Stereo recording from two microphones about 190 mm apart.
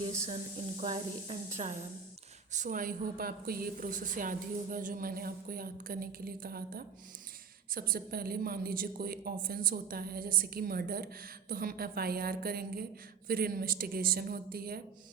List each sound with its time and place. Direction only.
0.8 s a woman's voice: 30° right (ahead or behind); by 14.8 s 50° right (ahead or behind)